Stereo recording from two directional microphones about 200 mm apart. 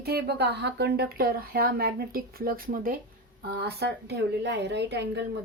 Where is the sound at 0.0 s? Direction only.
55° right (ahead or behind).